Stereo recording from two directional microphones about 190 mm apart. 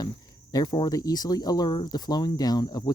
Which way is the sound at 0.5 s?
20° left (ahead or behind).